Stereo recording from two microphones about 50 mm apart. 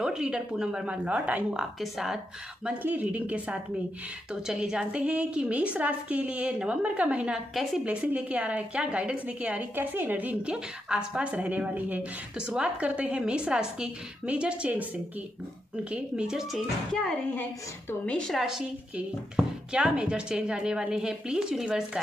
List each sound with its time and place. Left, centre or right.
0.0 s speech: centre
1.8 s speech: centre
2.8 s a woman's voice: right
4.3 s a woman's voice: centre
9.8 s a woman's voice: right
10.4 s a woman's voice: centre
12.4 s a woman's voice: centre
15.8 s a woman's voice: right
16.3 s speech: centre
18.3 s speech: centre